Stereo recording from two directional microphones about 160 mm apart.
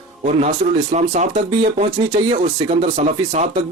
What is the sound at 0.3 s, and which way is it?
Speech, 45° right (ahead or behind).